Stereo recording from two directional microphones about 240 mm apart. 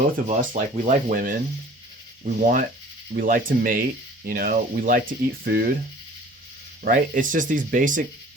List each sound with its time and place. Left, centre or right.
0.3 s speech: right
6.8 s speech: right